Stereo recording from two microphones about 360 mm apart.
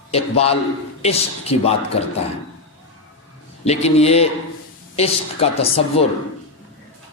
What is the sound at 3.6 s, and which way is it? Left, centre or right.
A woman's voice, centre.